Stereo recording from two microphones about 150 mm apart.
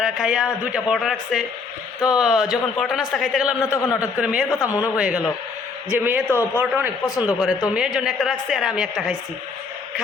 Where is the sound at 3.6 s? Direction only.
20° left (ahead or behind).